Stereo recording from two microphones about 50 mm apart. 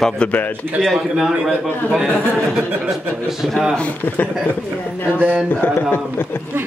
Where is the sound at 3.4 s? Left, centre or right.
Centre.